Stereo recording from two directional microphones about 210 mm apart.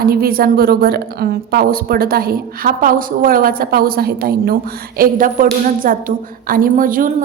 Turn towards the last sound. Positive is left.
turn(degrees=-40)  # may be behind; listen again after turning